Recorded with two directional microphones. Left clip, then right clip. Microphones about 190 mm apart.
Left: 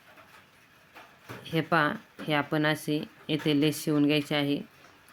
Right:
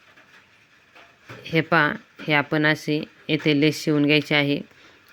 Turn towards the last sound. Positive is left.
turn(degrees=-25)  # may be behind; listen again after turning